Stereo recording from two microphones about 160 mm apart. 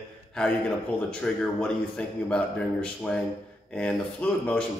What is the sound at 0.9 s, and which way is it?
Speech, 5° left (ahead or behind).